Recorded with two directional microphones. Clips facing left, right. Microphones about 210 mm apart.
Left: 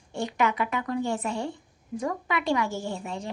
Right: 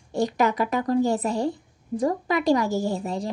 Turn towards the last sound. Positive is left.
turn(degrees=-40)  # may be behind; listen again after turning